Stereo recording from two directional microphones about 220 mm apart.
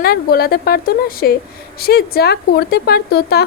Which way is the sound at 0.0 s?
45° left (ahead or behind).